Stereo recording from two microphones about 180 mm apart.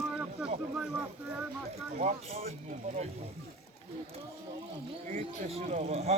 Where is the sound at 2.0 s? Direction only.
40° right (ahead or behind).